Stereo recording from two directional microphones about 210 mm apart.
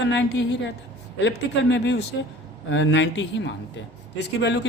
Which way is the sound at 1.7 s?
55° left (ahead or behind).